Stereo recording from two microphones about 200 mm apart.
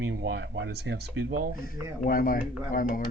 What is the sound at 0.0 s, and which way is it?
Speech, 65° right (ahead or behind).